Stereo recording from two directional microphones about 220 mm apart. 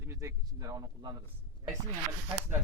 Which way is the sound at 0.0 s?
15° right (ahead or behind).